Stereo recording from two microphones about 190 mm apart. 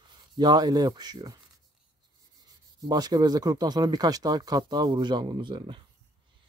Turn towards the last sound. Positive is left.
turn(degrees=-25)  # may be behind; listen again after turning